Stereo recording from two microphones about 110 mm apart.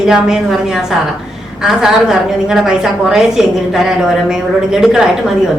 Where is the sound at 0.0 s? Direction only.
5° right (ahead or behind).